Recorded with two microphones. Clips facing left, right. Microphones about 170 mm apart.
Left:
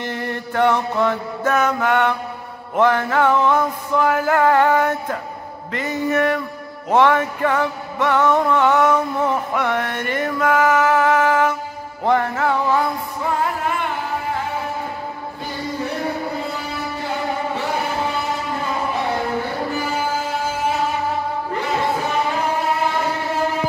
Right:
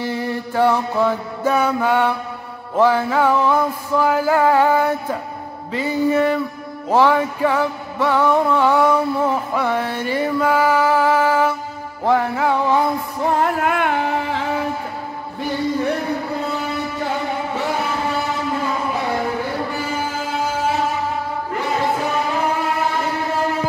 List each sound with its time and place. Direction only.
0.0 s mantra: 10° right (ahead or behind)
2.8 s music: 10° right (ahead or behind)
13.4 s carnatic music: 65° right (ahead or behind)